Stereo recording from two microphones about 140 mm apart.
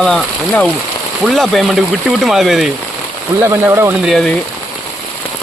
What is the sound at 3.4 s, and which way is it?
Speech, 20° right (ahead or behind).